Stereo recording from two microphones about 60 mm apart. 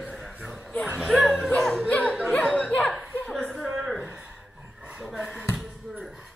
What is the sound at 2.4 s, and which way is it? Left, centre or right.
Chuckle, centre.